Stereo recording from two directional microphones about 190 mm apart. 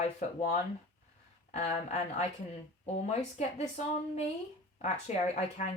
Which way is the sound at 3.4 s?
35° left (ahead or behind).